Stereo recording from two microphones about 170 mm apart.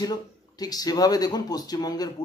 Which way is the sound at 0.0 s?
20° left (ahead or behind).